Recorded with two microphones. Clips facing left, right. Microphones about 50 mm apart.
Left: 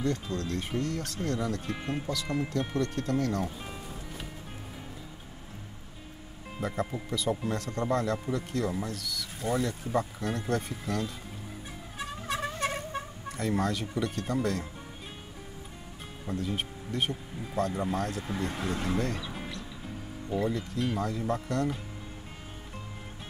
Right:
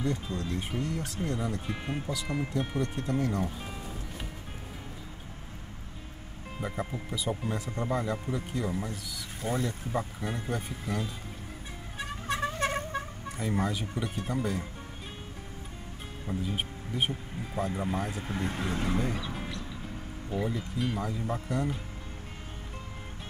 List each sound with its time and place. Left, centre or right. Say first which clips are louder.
0.0 s speech: left 1 dB; centre
6.6 s speech: left 3 dB; centre
12.3 s vehicle: right 2 dB; centre
12.5 s vehicle: right 2 dB; right
13.4 s speech: left 2 dB; centre
16.3 s speech: left 1 dB; centre